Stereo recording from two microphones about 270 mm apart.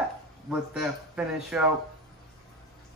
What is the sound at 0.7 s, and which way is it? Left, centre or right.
Speech, centre.